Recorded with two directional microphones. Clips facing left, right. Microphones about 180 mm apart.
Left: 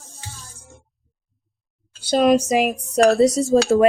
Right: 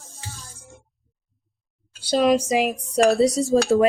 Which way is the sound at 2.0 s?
50° left (ahead or behind).